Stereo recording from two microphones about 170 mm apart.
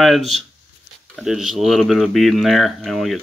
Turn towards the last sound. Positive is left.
turn(degrees=0)  # may be behind; listen again after turning